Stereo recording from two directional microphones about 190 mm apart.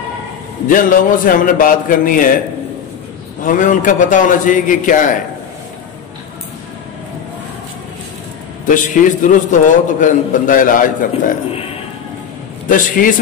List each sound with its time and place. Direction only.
0.7 s a man's voice: 45° left (ahead or behind)
3.4 s a man's voice: 45° left (ahead or behind)
8.6 s a man's voice: 45° left (ahead or behind)
12.6 s a man's voice: 45° left (ahead or behind)